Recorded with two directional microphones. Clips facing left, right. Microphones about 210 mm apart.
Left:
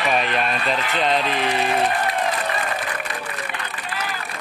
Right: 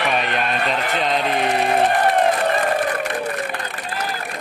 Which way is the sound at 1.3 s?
35° right (ahead or behind).